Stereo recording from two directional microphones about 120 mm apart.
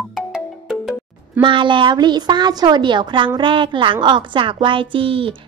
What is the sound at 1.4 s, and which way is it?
A woman's voice, 40° right (ahead or behind).